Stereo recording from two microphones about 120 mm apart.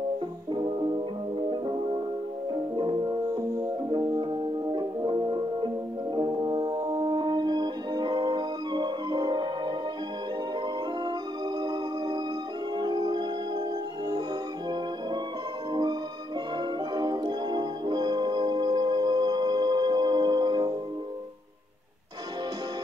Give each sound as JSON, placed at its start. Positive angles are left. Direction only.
{"t": 0.5, "sound": "music", "side_deg": -40}
{"t": 11.6, "sound": "music", "side_deg": -35}
{"t": 15.7, "sound": "music", "side_deg": -35}